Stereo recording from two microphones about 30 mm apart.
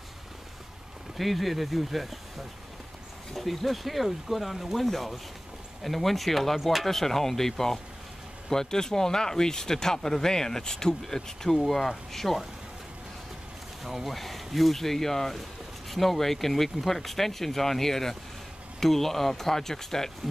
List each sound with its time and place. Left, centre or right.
1.1 s speech: centre
6.9 s speech: centre
13.8 s speech: centre